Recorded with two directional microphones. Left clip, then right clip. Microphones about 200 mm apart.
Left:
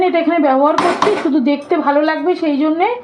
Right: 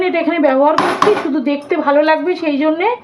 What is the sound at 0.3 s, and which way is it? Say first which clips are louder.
A woman's voice: even; 10° left (ahead or behind).